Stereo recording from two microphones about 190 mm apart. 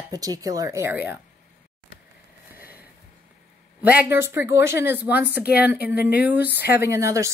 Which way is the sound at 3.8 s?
10° right (ahead or behind).